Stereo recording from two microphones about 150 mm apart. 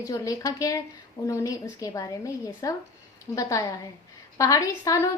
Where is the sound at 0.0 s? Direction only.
25° left (ahead or behind).